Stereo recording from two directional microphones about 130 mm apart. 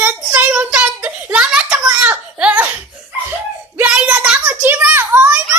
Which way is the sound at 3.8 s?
10° right (ahead or behind).